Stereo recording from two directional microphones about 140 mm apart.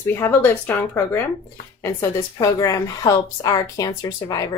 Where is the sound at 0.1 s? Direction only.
15° left (ahead or behind).